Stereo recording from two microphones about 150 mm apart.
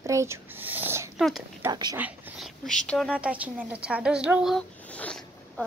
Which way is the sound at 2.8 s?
5° left (ahead or behind).